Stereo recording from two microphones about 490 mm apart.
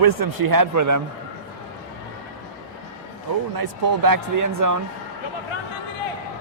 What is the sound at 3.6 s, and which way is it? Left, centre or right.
Speech, right.